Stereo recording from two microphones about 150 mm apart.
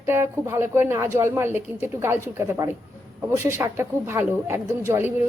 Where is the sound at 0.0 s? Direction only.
15° right (ahead or behind).